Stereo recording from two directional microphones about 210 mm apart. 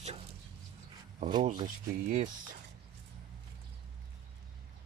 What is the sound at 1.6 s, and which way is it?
Speech, 40° right (ahead or behind).